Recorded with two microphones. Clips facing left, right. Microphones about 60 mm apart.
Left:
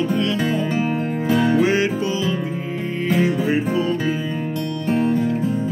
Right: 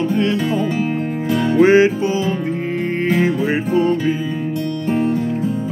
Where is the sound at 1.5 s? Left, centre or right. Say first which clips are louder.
Right 6 dB; right.